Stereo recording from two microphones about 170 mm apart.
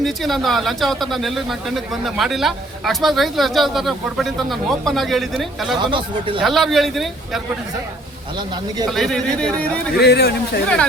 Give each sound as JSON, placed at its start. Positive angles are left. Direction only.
{"t": 0.0, "sound": "speech", "side_deg": 0}
{"t": 5.8, "sound": "speech", "side_deg": -30}
{"t": 6.4, "sound": "speech", "side_deg": 0}
{"t": 8.9, "sound": "speech", "side_deg": 0}
{"t": 10.0, "sound": "speech", "side_deg": 70}